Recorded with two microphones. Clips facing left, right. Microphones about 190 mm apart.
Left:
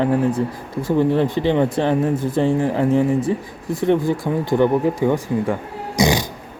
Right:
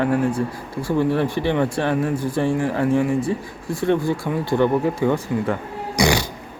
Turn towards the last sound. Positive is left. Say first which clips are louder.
# left 1 dB
turn(degrees=20)  # may be behind; listen again after turning